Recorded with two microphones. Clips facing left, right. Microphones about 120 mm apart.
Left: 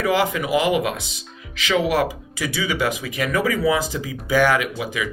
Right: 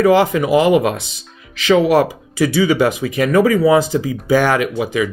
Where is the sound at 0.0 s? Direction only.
35° right (ahead or behind).